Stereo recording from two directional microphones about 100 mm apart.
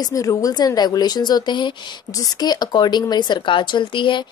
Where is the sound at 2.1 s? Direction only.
40° left (ahead or behind).